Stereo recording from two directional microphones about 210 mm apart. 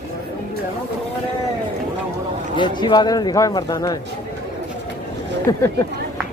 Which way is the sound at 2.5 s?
20° left (ahead or behind).